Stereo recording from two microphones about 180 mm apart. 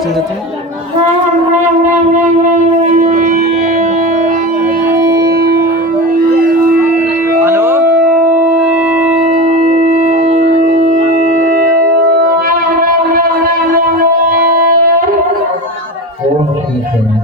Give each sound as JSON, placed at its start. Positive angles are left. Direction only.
{"t": 3.0, "sound": "music", "side_deg": -45}
{"t": 4.9, "sound": "music", "side_deg": -20}
{"t": 5.4, "sound": "music", "side_deg": -60}
{"t": 7.4, "sound": "music", "side_deg": -10}
{"t": 10.0, "sound": "music", "side_deg": -45}
{"t": 12.5, "sound": "shofar", "side_deg": -50}
{"t": 13.7, "sound": "music", "side_deg": -55}